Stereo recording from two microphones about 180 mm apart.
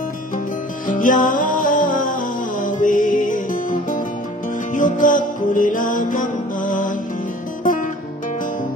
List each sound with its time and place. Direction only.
0.8 s music: 50° left (ahead or behind)
4.7 s music: 45° left (ahead or behind)